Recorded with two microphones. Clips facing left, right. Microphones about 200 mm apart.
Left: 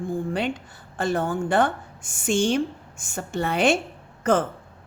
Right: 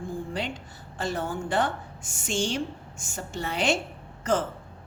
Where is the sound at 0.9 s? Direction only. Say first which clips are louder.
Left 6 dB; 55° left (ahead or behind).